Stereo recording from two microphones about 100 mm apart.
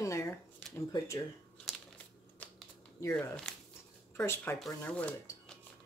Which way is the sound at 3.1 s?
5° left (ahead or behind).